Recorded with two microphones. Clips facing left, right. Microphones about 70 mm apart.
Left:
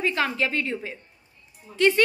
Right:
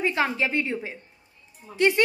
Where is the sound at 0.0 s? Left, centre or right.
Right.